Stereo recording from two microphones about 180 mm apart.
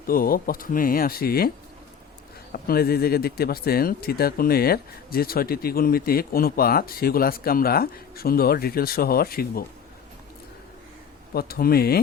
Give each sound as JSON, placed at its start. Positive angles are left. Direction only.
{"t": 0.1, "sound": "speech", "side_deg": 55}
{"t": 2.5, "sound": "speech", "side_deg": 55}
{"t": 11.3, "sound": "speech", "side_deg": 55}